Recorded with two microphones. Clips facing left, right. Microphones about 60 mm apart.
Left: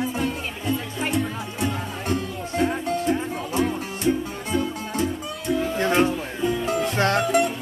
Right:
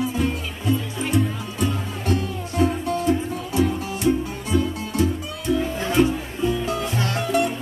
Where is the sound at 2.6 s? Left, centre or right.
Left.